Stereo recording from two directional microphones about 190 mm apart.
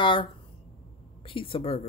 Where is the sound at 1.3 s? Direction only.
25° left (ahead or behind).